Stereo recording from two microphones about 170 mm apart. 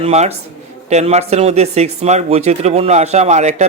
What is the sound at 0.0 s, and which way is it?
A man's voice, 40° right (ahead or behind).